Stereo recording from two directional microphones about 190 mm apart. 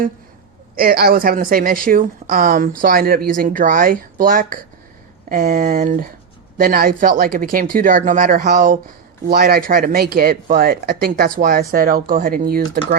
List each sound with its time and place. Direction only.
0.8 s a woman's voice: 50° right (ahead or behind)